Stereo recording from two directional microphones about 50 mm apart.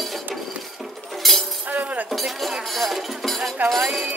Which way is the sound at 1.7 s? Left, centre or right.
Right.